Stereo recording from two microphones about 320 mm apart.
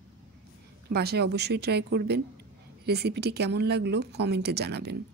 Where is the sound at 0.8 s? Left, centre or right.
Right.